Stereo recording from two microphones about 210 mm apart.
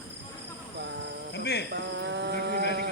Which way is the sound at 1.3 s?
55° left (ahead or behind).